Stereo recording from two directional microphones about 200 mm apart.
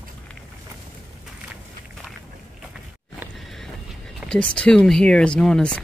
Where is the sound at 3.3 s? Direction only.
Centre (ahead or behind).